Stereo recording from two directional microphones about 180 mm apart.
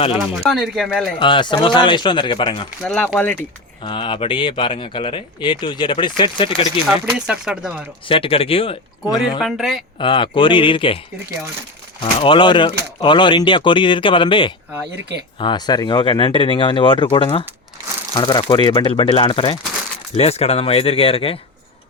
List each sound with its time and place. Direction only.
0.2 s speech: centre (ahead or behind)
1.2 s speech: 25° left (ahead or behind)
2.8 s speech: centre (ahead or behind)
3.8 s speech: 25° left (ahead or behind)
6.8 s speech: 5° right (ahead or behind)
8.0 s speech: 30° left (ahead or behind)
9.4 s speech: centre (ahead or behind)
10.0 s speech: 25° left (ahead or behind)
12.2 s speech: 25° left (ahead or behind)